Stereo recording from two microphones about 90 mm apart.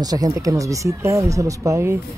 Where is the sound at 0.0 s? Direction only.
45° right (ahead or behind).